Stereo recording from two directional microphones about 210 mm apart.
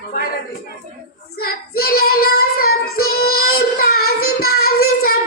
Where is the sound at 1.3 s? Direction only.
45° left (ahead or behind).